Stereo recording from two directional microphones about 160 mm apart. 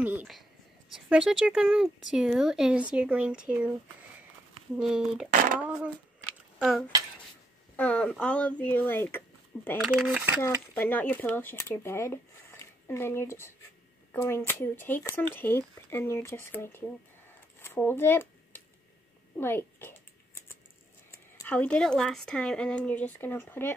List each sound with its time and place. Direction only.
0.0 s a sound: 10° right (ahead or behind)
0.9 s speech: centre (ahead or behind)
4.7 s speech: 5° right (ahead or behind)
7.7 s speech: 10° left (ahead or behind)
9.7 s speech: centre (ahead or behind)
10.4 s speech: 10° left (ahead or behind)
17.6 s dishes: 15° left (ahead or behind)
19.3 s a sound: 15° left (ahead or behind)
21.1 s speech: 10° left (ahead or behind)